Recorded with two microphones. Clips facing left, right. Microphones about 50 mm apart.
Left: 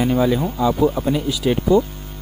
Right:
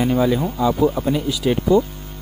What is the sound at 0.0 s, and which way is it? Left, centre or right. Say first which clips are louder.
Speech: even; centre.